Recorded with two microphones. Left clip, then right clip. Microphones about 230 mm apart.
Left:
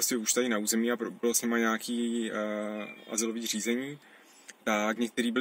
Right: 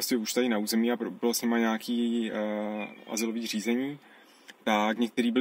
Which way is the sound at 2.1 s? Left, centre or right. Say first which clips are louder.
Right 1 dB; centre.